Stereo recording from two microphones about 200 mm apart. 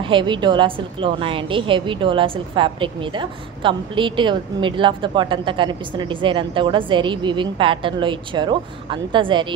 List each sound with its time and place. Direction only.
0.0 s a woman's voice: 25° right (ahead or behind)